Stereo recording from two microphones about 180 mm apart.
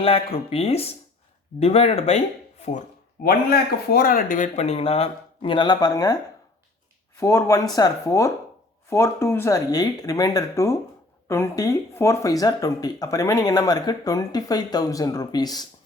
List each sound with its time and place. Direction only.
0.0 s speech: 35° left (ahead or behind)
3.2 s speech: 60° left (ahead or behind); by 6.1 s 20° left (ahead or behind)
7.2 s speech: 15° left (ahead or behind)